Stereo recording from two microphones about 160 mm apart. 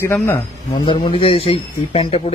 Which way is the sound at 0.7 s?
35° left (ahead or behind).